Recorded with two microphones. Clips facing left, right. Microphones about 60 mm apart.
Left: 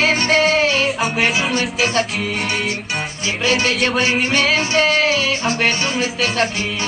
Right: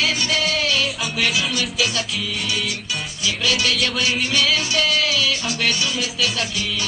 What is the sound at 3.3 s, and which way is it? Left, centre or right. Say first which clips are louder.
Music: left 3 dB; left.